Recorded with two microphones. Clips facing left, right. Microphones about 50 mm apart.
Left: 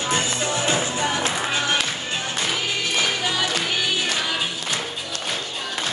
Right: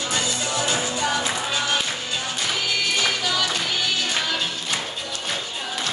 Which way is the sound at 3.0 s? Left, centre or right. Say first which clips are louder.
Even; left.